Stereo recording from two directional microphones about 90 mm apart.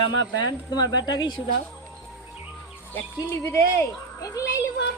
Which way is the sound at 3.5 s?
35° left (ahead or behind).